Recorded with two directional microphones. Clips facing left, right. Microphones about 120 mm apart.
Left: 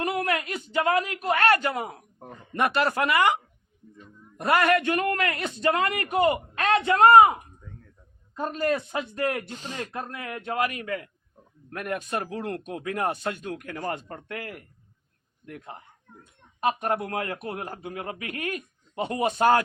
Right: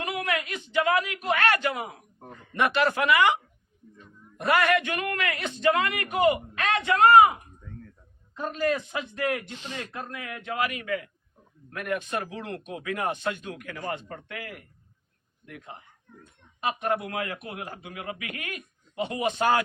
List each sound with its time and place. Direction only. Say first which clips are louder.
0.0 s a man's voice: left 3 dB; 35° left (ahead or behind)
4.4 s a man's voice: left 1 dB; 35° left (ahead or behind)
8.4 s a man's voice: left 1 dB; 40° left (ahead or behind)